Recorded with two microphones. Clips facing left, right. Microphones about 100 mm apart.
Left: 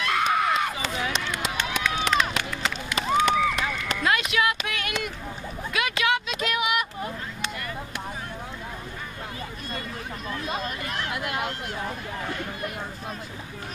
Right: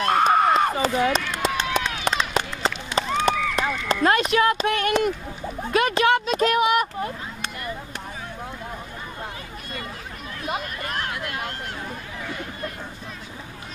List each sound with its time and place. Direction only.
0.0 s a sound: 40° right (ahead or behind)
1.3 s run: 35° right (ahead or behind)
3.5 s speech: 35° right (ahead or behind)
10.8 s hubbub: 50° right (ahead or behind)